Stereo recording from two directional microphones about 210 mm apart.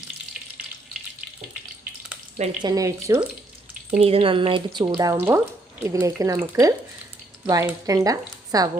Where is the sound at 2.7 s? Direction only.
15° right (ahead or behind).